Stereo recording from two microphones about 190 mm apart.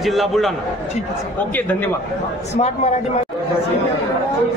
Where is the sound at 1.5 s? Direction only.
10° left (ahead or behind).